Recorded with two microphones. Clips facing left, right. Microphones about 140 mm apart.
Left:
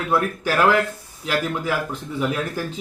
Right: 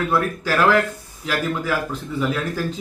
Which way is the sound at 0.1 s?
15° left (ahead or behind).